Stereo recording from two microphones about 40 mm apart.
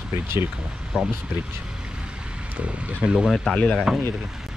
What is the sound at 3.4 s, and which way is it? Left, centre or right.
Speech, left.